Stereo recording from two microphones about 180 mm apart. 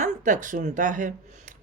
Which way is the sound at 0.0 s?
45° right (ahead or behind).